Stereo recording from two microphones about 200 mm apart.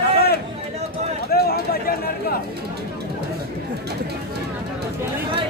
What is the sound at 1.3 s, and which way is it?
Speech, 50° left (ahead or behind).